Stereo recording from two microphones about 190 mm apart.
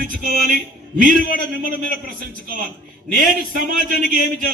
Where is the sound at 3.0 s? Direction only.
45° right (ahead or behind).